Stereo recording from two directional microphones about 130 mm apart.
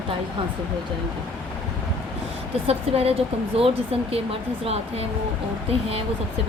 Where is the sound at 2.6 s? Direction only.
50° right (ahead or behind).